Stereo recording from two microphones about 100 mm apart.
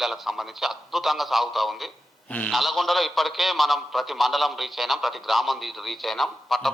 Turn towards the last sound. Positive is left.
turn(degrees=0)  # may be behind; listen again after turning